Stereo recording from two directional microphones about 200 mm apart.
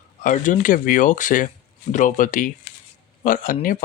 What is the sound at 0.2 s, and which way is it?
Speech, 40° left (ahead or behind).